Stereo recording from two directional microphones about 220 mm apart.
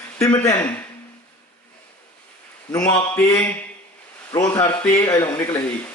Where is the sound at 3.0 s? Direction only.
10° left (ahead or behind).